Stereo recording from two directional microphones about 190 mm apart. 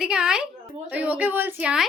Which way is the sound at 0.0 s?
5° right (ahead or behind).